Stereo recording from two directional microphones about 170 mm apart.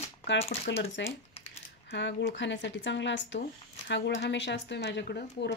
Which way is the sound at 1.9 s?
90° left.